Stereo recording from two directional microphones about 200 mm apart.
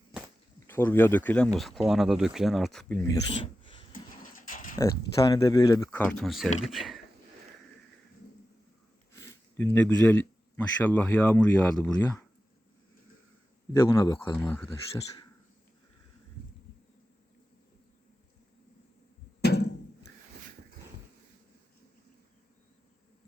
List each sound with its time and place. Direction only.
0.7 s speech: 10° left (ahead or behind)
4.2 s pigeon: 40° left (ahead or behind)
4.8 s speech: 15° left (ahead or behind); by 7.0 s centre (ahead or behind)
9.1 s speech: 10° left (ahead or behind)
13.9 s speech: 15° left (ahead or behind)
19.4 s a sound: 55° left (ahead or behind)